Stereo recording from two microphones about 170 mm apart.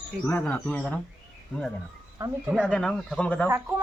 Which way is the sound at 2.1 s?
20° right (ahead or behind).